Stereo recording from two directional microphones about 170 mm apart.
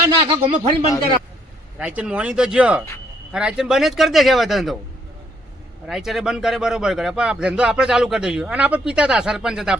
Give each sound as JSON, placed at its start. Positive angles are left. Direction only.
{"t": 0.2, "sound": "speech", "side_deg": -25}
{"t": 1.8, "sound": "speech", "side_deg": -10}
{"t": 5.9, "sound": "speech", "side_deg": 0}